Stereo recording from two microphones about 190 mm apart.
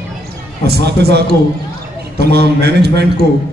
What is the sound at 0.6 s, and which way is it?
A man's voice, 55° right (ahead or behind).